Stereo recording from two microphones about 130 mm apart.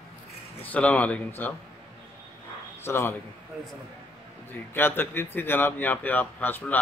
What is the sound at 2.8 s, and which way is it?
Speech, 20° left (ahead or behind).